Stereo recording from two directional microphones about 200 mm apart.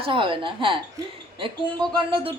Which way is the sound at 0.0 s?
25° right (ahead or behind).